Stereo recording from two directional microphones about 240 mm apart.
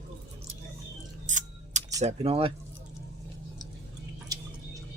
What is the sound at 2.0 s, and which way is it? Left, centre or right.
Speech, right.